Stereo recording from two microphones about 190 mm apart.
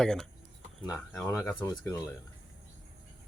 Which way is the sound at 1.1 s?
15° left (ahead or behind).